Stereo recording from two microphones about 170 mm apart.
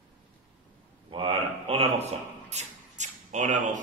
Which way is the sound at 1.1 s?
30° right (ahead or behind).